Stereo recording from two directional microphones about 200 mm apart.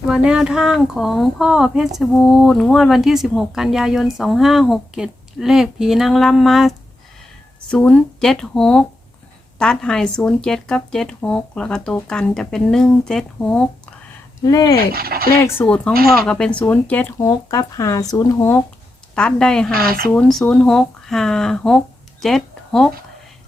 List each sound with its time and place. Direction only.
0.1 s speech: 5° right (ahead or behind)
14.4 s speech: 20° left (ahead or behind)
14.9 s speech: 50° right (ahead or behind)
15.5 s speech: 5° left (ahead or behind)
19.1 s speech: 5° left (ahead or behind)
19.7 s speech: 50° right (ahead or behind)
20.1 s speech: 5° left (ahead or behind)
22.2 s a sound: centre (ahead or behind)